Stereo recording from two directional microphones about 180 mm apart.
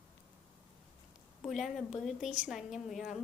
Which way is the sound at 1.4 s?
Centre (ahead or behind).